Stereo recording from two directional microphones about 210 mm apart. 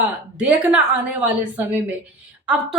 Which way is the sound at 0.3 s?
5° right (ahead or behind).